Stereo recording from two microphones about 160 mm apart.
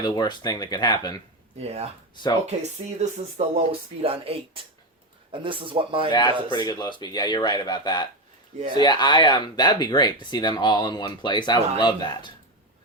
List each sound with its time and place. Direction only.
0.0 s speech: 25° left (ahead or behind)
1.5 s speech: 40° right (ahead or behind)
6.1 s speech: 30° left (ahead or behind)